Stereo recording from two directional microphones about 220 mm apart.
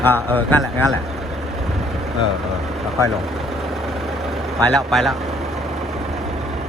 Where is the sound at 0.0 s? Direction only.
10° left (ahead or behind).